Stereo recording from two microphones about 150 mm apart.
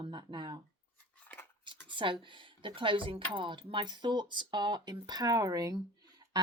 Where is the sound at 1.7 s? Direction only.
30° right (ahead or behind).